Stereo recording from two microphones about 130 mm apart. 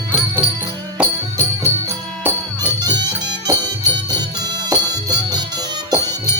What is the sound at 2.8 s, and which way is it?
Music, 35° right (ahead or behind).